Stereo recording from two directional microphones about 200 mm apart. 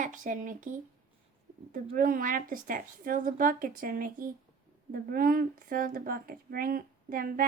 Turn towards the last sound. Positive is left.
turn(degrees=-45)  # may be behind; listen again after turning